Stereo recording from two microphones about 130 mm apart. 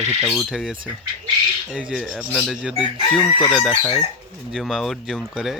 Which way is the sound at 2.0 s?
10° left (ahead or behind).